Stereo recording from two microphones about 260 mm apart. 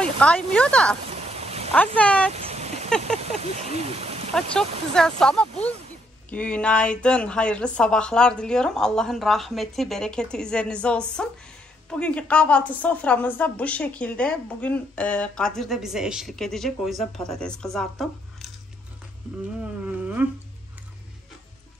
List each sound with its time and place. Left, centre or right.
0.0 s speech: centre
1.0 s a sound: right
2.0 s a woman's voice: centre
2.3 s a sound: right
3.2 s speech: right
4.3 s a woman's voice: centre
19.6 s insect: centre